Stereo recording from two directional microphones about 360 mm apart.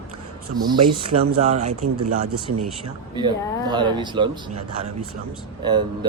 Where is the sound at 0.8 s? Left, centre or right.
Right.